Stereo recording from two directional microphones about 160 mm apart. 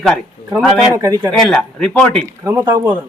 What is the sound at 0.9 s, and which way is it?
Speech, 20° right (ahead or behind).